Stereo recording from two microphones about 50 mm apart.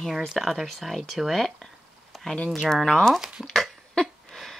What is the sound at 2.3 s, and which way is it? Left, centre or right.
Speech, left.